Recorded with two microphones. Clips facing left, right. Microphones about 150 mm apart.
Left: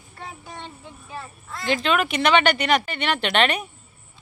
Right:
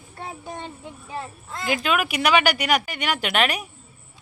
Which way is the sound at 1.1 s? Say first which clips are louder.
Right 3 dB; 20° right (ahead or behind).